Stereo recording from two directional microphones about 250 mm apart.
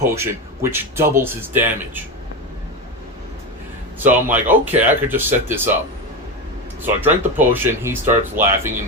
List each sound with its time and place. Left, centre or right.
0.0 s speech: centre
4.0 s speech: centre
6.8 s speech: centre